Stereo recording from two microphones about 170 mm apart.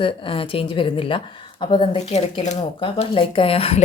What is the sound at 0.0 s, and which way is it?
Speech, 30° left (ahead or behind).